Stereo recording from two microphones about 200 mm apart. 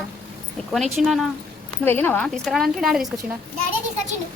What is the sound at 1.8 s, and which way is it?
A woman's voice, 10° left (ahead or behind).